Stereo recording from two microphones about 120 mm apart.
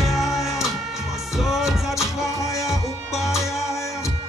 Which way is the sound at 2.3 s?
25° left (ahead or behind).